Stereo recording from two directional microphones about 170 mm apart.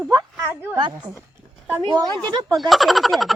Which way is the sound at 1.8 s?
25° right (ahead or behind).